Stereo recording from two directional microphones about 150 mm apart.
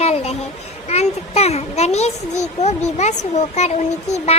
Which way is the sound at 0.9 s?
45° left (ahead or behind).